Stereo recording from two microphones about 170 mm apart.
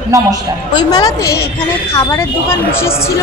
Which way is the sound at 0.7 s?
25° left (ahead or behind).